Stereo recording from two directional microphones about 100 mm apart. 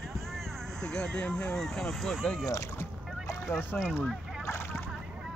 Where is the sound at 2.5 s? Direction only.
30° left (ahead or behind).